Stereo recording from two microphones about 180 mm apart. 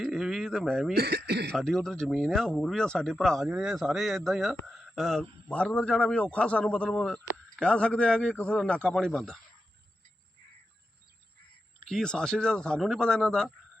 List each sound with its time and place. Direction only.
0.0 s speech: centre (ahead or behind)
0.9 s speech: 65° right (ahead or behind)
1.5 s speech: 5° left (ahead or behind)
11.9 s speech: 5° left (ahead or behind)